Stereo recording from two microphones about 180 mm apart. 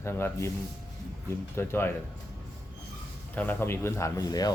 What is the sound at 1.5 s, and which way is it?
Speech, 10° left (ahead or behind).